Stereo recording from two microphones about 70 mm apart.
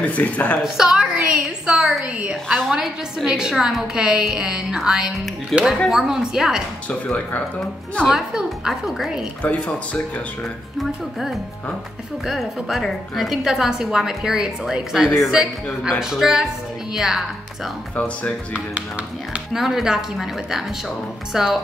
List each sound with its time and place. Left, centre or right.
0.0 s speech: left
0.7 s a woman's voice: centre
2.0 s a woman's voice: centre
5.5 s a woman's voice: centre
5.9 s a woman's voice: centre
6.9 s speech: centre
8.1 s a woman's voice: centre
9.4 s speech: centre
10.8 s a woman's voice: centre
17.9 s speech: centre
19.5 s a woman's voice: centre